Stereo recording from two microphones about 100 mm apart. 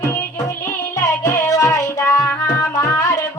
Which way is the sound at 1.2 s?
35° left (ahead or behind).